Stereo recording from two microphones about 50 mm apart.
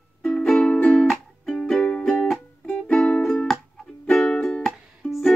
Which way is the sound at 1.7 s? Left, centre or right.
Left.